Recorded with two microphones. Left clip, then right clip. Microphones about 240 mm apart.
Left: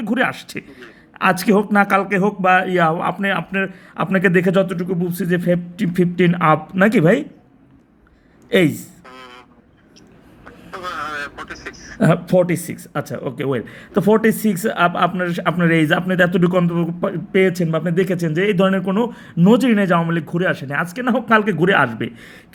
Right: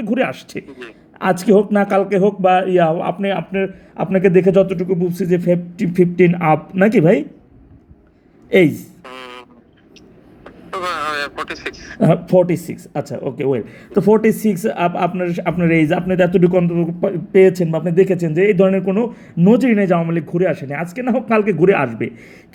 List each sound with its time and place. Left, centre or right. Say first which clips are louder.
0.0 s speech: even; centre
5.7 s speech: right 1 dB; left
6.0 s speech: right 3 dB; centre
8.4 s speech: right 3 dB; centre
9.0 s a sound: right 8 dB; centre
10.7 s a sound: right 5 dB; centre
11.9 s speech: right 2 dB; centre
12.5 s speech: right 1 dB; left
13.1 s speech: right 4 dB; centre